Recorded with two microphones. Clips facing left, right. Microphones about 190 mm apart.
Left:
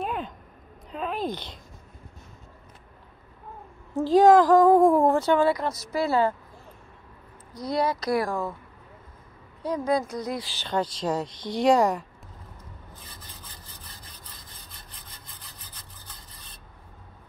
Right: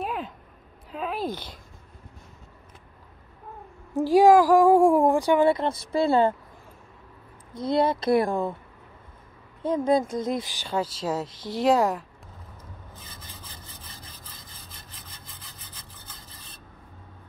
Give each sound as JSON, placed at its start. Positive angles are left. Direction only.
{"t": 0.0, "sound": "a sound", "side_deg": -5}
{"t": 1.3, "sound": "speech", "side_deg": 20}
{"t": 3.9, "sound": "speech", "side_deg": -10}
{"t": 5.5, "sound": "speech", "side_deg": -25}
{"t": 7.5, "sound": "speech", "side_deg": -25}
{"t": 9.6, "sound": "speech", "side_deg": -25}
{"t": 14.9, "sound": "sawing", "side_deg": 0}